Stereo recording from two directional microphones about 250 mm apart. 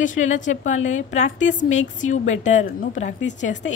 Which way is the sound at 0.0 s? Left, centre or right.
Left.